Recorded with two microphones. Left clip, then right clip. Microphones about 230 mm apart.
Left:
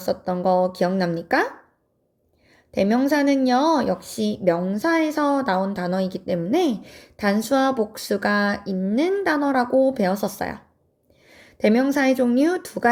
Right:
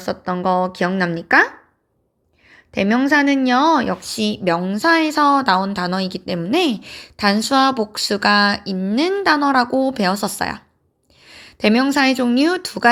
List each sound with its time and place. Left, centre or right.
0.0 s speech: centre
2.5 s a sound: centre
3.1 s a woman's voice: centre